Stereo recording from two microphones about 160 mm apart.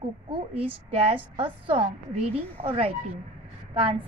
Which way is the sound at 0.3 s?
35° right (ahead or behind).